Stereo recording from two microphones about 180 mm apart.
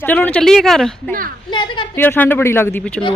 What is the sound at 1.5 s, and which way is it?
Speech, 25° left (ahead or behind).